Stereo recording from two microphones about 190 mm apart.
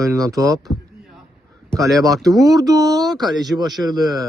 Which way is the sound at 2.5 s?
20° right (ahead or behind).